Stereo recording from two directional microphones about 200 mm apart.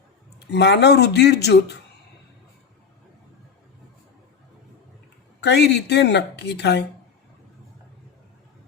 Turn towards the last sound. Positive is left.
turn(degrees=60)  # may be behind; listen again after turning